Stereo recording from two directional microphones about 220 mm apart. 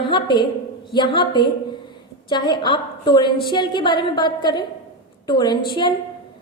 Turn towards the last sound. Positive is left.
turn(degrees=20)  # may be behind; listen again after turning